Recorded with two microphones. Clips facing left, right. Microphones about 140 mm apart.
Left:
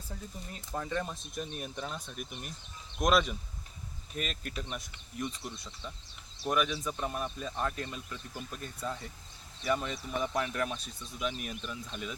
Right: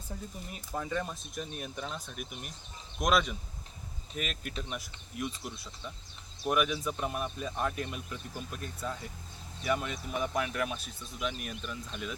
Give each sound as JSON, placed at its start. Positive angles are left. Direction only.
{"t": 0.1, "sound": "speech", "side_deg": -15}
{"t": 0.7, "sound": "speech", "side_deg": -5}